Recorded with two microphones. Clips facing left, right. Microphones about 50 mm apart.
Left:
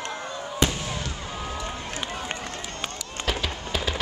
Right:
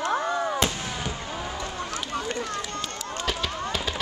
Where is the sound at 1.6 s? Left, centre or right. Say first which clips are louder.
Right 1 dB; left.